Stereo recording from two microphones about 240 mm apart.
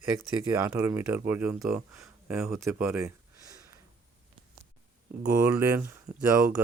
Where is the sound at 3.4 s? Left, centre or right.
Centre.